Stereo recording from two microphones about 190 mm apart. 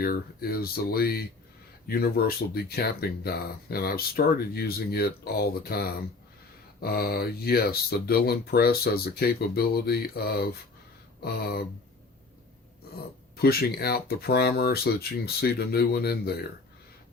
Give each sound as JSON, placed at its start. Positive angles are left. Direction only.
{"t": 0.0, "sound": "speech", "side_deg": 55}
{"t": 13.3, "sound": "speech", "side_deg": 55}